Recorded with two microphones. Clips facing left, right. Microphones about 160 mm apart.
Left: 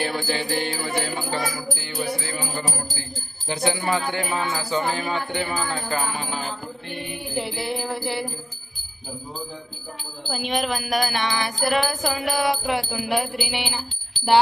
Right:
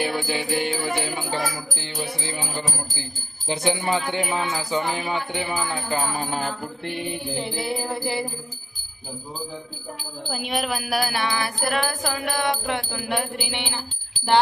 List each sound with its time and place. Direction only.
0.0 s music: 15° right (ahead or behind)
7.3 s music: centre (ahead or behind)
10.2 s music: 5° right (ahead or behind)